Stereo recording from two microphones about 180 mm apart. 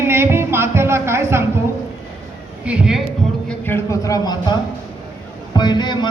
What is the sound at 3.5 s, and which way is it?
A man's voice, 15° left (ahead or behind).